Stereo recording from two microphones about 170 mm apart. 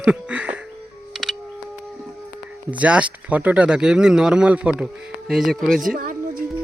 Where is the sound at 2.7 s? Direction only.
5° right (ahead or behind).